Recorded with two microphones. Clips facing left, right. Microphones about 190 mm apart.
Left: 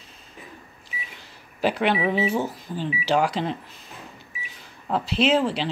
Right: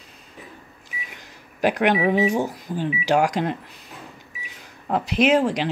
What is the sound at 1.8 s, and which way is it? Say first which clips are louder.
Speech: right 4 dB; 15° right (ahead or behind).